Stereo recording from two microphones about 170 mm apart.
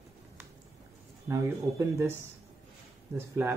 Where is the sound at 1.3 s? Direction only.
15° right (ahead or behind).